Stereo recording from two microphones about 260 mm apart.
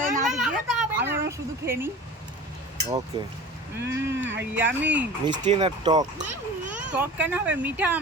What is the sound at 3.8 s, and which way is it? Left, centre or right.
Speech, centre.